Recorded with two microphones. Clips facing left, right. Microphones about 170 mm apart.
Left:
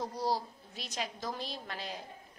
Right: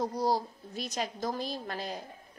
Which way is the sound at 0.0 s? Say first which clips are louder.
Right 4 dB; 45° right (ahead or behind).